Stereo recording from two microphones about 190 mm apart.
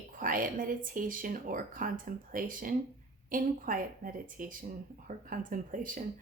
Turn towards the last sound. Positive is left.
turn(degrees=-45)  # may be behind; listen again after turning